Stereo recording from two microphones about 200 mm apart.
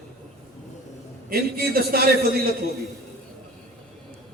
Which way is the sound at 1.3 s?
50° right (ahead or behind).